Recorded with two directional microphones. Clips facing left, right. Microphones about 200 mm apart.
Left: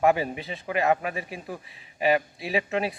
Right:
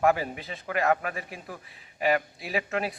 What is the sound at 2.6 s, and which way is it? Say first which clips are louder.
Speech: left 2 dB; 25° left (ahead or behind).